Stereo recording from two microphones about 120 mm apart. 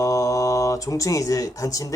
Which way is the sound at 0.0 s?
25° left (ahead or behind).